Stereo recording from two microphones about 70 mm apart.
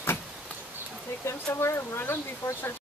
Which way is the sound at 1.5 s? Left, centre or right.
Left.